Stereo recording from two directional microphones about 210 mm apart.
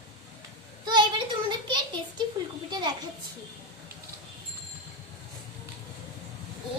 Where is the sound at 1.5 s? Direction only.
20° right (ahead or behind).